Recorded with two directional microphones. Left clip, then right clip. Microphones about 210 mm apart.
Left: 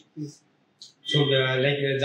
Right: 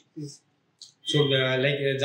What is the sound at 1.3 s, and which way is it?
Speech, 40° right (ahead or behind).